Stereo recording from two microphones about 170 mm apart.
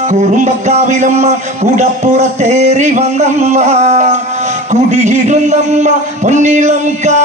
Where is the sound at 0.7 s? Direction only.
45° right (ahead or behind).